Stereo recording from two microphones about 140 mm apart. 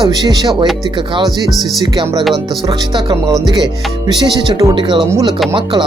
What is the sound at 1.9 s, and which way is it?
Speech, 30° right (ahead or behind).